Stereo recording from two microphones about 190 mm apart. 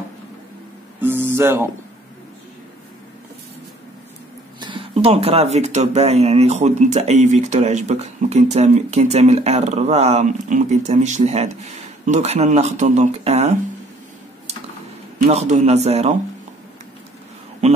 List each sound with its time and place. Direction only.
1.0 s music: 10° right (ahead or behind)
4.6 s speech: 25° right (ahead or behind)
15.2 s speech: 35° right (ahead or behind)
17.6 s a sound: 35° right (ahead or behind)